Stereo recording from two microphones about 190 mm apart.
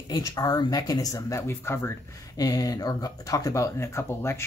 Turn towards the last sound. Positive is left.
turn(degrees=15)  # may be behind; listen again after turning